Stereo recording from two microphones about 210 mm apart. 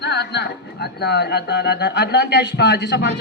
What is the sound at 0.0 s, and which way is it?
A man's voice, 50° left (ahead or behind).